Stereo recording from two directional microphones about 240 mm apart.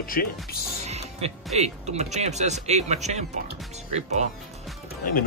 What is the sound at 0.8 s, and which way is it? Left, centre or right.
Speech, right.